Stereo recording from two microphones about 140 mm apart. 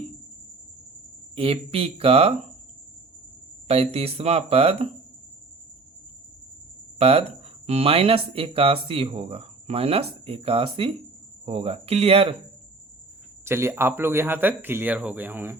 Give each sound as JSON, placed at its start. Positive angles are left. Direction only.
{"t": 1.4, "sound": "speech", "side_deg": -45}
{"t": 3.7, "sound": "speech", "side_deg": -45}
{"t": 7.0, "sound": "speech", "side_deg": -45}
{"t": 13.4, "sound": "speech", "side_deg": -20}